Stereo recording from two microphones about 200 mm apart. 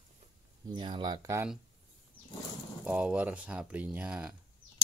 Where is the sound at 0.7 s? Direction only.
25° right (ahead or behind).